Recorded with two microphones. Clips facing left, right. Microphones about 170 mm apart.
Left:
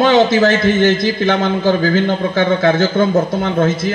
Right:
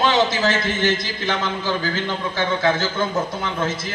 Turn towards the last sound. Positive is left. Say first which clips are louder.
# left 9 dB
turn(degrees=55)  # may be behind; listen again after turning